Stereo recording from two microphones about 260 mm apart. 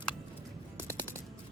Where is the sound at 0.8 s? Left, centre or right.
Centre.